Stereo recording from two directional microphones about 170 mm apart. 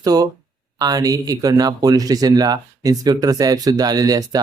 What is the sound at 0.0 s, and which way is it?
Speech, 20° right (ahead or behind).